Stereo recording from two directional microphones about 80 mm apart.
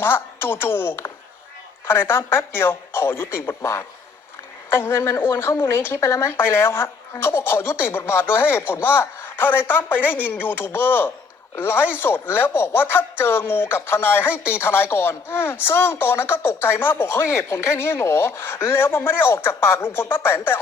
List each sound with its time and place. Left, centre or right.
0.0 s speech: left